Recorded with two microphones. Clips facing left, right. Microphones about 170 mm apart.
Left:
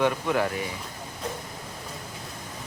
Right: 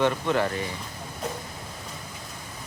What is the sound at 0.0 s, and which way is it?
Speech, 5° left (ahead or behind).